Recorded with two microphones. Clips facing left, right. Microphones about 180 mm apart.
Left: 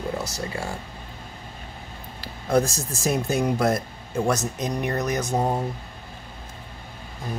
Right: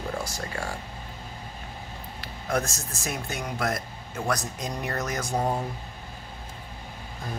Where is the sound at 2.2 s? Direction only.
30° left (ahead or behind).